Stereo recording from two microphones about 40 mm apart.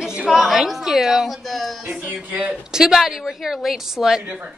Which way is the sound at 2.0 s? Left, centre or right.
Right.